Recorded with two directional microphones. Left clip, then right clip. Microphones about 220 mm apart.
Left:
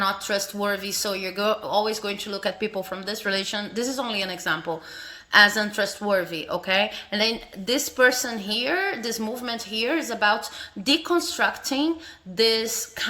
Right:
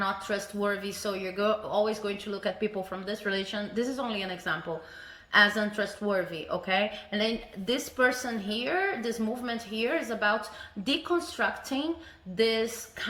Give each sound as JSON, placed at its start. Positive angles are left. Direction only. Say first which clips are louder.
{"t": 0.0, "sound": "speech", "louder": "left 6 dB", "side_deg": 40}